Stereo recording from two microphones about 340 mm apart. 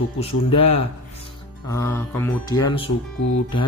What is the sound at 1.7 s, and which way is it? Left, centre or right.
Speech, centre.